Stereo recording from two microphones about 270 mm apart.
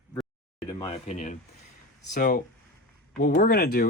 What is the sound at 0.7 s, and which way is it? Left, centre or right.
Speech, centre.